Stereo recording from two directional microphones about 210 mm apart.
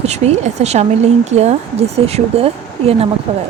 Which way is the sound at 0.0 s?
30° right (ahead or behind).